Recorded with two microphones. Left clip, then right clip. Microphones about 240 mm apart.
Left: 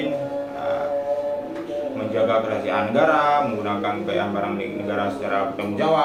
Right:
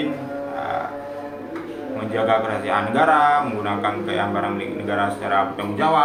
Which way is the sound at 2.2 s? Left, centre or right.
Centre.